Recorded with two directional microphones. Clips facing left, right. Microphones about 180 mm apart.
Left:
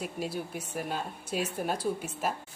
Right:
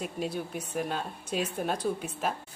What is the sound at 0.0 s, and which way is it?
A woman's voice, 5° left (ahead or behind).